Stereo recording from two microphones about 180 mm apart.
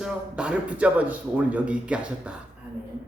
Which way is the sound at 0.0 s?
5° right (ahead or behind).